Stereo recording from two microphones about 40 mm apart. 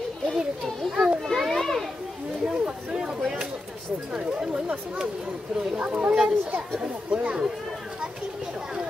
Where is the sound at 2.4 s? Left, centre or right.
Right.